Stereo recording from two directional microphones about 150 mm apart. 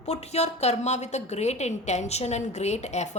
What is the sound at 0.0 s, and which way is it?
A woman's voice, 45° left (ahead or behind).